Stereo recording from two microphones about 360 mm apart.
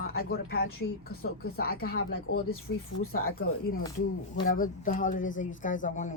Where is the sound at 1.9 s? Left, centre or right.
Left.